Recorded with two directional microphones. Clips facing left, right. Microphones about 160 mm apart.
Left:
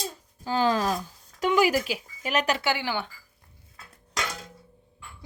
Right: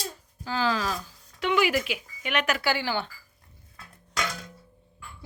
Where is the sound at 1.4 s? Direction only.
40° left (ahead or behind).